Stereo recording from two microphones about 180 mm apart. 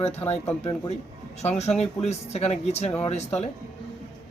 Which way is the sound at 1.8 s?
35° left (ahead or behind).